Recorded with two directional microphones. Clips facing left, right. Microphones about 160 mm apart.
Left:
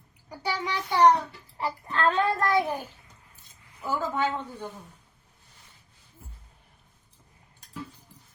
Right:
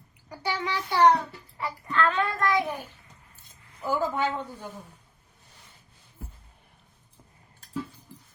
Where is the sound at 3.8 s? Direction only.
10° right (ahead or behind).